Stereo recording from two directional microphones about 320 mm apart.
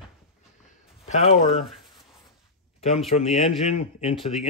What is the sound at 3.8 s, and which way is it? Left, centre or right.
Speech, centre.